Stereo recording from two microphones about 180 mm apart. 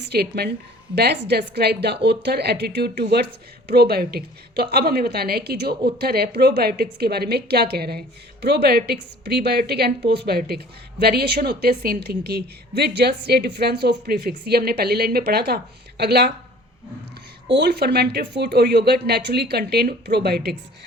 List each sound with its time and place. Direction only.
0.1 s a woman's voice: 60° right (ahead or behind)
17.6 s a woman's voice: 65° right (ahead or behind)